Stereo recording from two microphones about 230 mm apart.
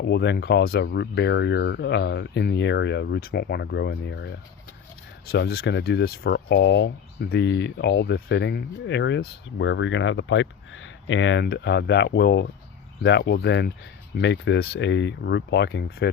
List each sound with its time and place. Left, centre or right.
0.0 s speech: left